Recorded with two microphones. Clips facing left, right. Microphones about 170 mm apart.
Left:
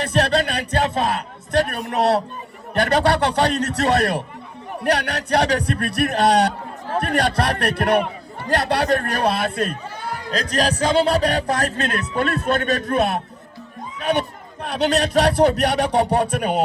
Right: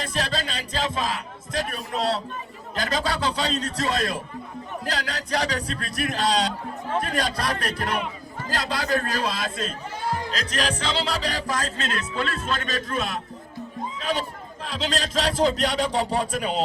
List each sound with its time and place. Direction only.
0.0 s speech: 65° left (ahead or behind)
10.5 s speech: 45° left (ahead or behind)
11.1 s a man's voice: 60° left (ahead or behind)